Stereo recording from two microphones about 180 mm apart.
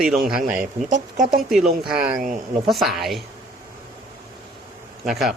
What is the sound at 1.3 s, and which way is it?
Speech, centre (ahead or behind).